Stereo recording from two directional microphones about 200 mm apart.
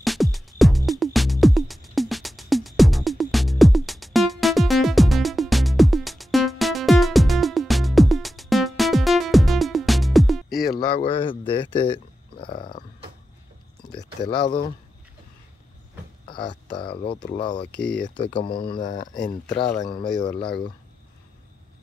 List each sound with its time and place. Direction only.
0.0 s music: centre (ahead or behind)
10.8 s speech: 25° left (ahead or behind)
12.4 s burping: 25° left (ahead or behind)
13.9 s speech: 20° left (ahead or behind)
16.3 s a sound: 20° left (ahead or behind)
16.7 s speech: 25° left (ahead or behind)
17.7 s speech: 5° left (ahead or behind)
18.2 s speech: 25° left (ahead or behind)